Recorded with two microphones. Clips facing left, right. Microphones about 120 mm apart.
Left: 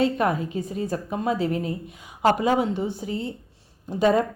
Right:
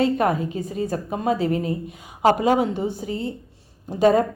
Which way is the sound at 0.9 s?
50° right (ahead or behind).